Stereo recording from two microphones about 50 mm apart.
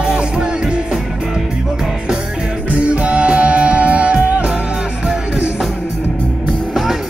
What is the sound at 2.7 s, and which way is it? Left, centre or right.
Music, right.